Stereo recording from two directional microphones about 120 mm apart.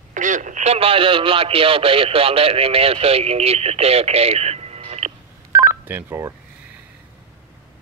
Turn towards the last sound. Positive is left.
turn(degrees=-25)  # may be behind; listen again after turning